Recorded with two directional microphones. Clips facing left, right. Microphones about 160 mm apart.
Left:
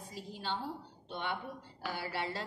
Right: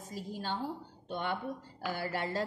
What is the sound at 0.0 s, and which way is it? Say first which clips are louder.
A woman's voice: right 3 dB; 45° right (ahead or behind).